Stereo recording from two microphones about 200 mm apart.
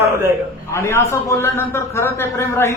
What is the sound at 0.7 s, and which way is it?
A man's voice, 15° left (ahead or behind).